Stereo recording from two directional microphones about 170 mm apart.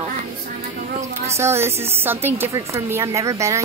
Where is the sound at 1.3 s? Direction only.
15° right (ahead or behind).